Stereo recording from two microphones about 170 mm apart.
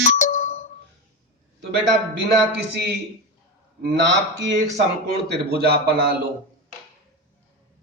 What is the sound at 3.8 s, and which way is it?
Speech, 90° right.